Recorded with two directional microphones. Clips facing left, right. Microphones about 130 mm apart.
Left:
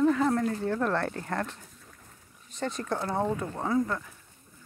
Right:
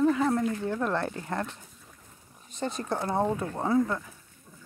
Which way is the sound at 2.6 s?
30° right (ahead or behind).